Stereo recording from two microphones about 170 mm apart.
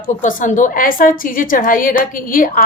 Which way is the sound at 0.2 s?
50° left (ahead or behind).